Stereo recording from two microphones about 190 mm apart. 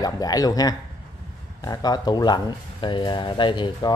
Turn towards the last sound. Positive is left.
turn(degrees=25)  # may be behind; listen again after turning